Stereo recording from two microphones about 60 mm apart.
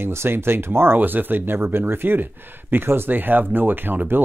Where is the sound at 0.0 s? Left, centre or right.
Right.